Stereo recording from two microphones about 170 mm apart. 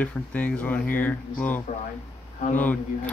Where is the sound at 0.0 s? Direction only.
10° left (ahead or behind).